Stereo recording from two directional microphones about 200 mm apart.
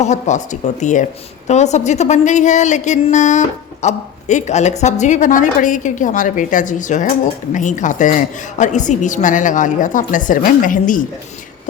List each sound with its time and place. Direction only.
0.0 s a woman's voice: 35° left (ahead or behind)